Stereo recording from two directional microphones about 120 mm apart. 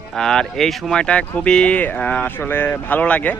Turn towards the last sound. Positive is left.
turn(degrees=10)  # may be behind; listen again after turning